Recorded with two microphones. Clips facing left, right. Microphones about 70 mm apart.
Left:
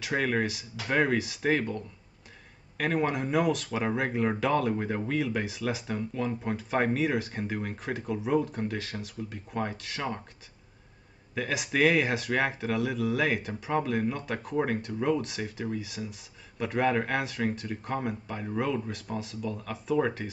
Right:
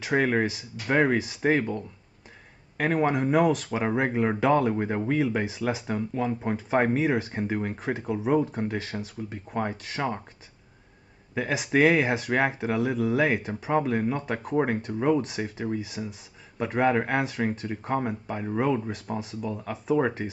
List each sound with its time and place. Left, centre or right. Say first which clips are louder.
0.0 s speech: right 4 dB; right
2.8 s speech: right 4 dB; right
11.3 s speech: right 4 dB; right